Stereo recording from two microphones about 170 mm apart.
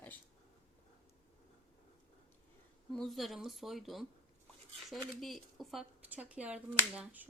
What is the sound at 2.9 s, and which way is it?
Speech, centre (ahead or behind).